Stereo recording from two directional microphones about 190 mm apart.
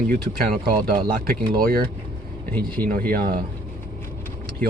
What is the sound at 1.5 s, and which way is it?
Speech, 50° right (ahead or behind).